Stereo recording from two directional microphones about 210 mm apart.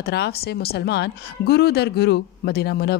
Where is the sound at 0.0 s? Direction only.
50° left (ahead or behind).